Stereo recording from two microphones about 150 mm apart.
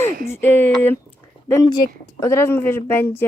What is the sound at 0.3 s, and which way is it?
Speech, 15° left (ahead or behind).